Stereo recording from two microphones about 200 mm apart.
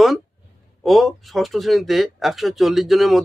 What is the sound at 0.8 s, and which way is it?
Speech, centre (ahead or behind).